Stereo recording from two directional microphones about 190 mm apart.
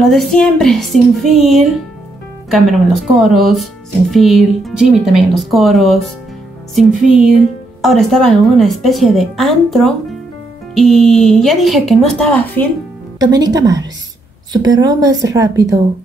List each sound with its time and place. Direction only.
0.0 s a woman's voice: centre (ahead or behind)
13.2 s a woman's voice: 20° right (ahead or behind)